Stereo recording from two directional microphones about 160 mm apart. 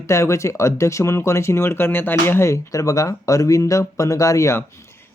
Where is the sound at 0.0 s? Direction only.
20° left (ahead or behind).